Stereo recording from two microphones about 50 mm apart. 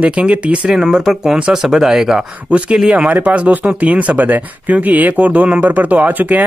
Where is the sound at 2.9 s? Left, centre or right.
Right.